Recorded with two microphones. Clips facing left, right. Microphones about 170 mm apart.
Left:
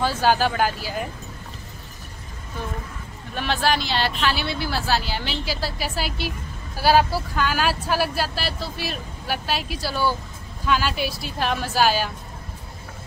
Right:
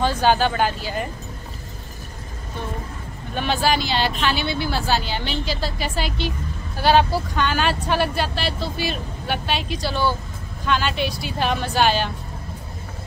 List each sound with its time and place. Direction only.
0.0 s speech: 5° left (ahead or behind)
3.3 s a woman's voice: centre (ahead or behind)